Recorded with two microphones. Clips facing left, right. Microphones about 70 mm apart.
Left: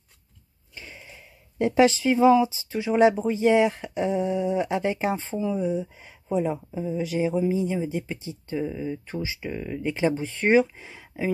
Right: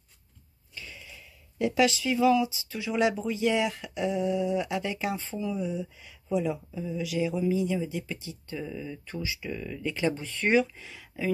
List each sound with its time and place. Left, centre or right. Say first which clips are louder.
0.7 s speech: left 2 dB; left